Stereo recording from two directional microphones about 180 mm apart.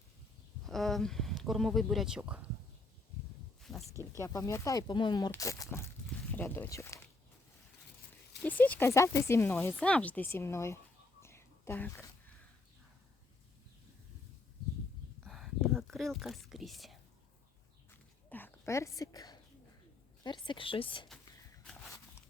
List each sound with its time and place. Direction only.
0.7 s speech: centre (ahead or behind)
3.6 s a sound: centre (ahead or behind)
4.2 s speech: 20° left (ahead or behind)
8.4 s speech: 10° left (ahead or behind)
11.2 s whispering: 15° left (ahead or behind)
15.2 s whispering: centre (ahead or behind)
18.3 s a sound: 10° left (ahead or behind)
20.2 s speech: 25° left (ahead or behind)